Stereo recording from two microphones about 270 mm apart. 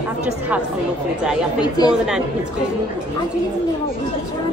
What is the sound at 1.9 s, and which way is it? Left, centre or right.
Speech, centre.